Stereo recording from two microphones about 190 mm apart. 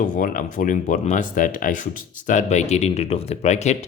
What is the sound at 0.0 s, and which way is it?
Speech, 45° left (ahead or behind).